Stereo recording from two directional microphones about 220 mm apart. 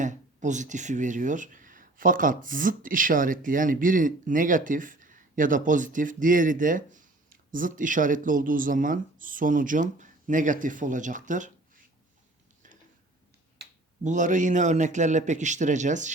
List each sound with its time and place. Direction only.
0.0 s speech: 35° right (ahead or behind)
13.6 s a sound: 50° right (ahead or behind)
14.0 s speech: 35° right (ahead or behind)